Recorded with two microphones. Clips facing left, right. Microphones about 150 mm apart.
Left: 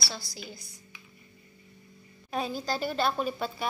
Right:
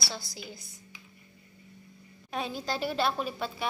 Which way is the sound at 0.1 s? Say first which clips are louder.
Right 1 dB; 20° right (ahead or behind).